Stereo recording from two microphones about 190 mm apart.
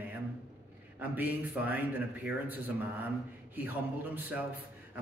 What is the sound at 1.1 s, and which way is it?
Speech, 10° right (ahead or behind).